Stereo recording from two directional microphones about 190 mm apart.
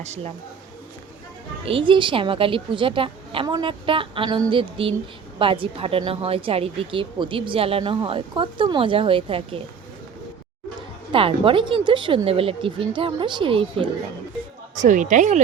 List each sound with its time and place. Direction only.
0.0 s a woman's voice: 35° right (ahead or behind)
1.6 s speech: 25° right (ahead or behind)
11.1 s speech: 30° right (ahead or behind)
14.8 s a woman's voice: 40° right (ahead or behind)